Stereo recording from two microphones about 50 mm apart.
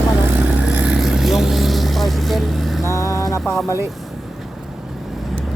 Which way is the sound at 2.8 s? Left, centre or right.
Left.